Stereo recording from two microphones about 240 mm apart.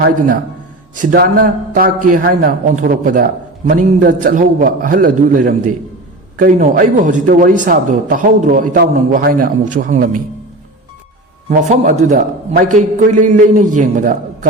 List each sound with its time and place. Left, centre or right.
1.1 s speech: right
11.4 s speech: right